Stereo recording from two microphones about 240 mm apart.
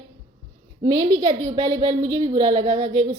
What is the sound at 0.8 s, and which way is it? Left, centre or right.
A woman's voice, centre.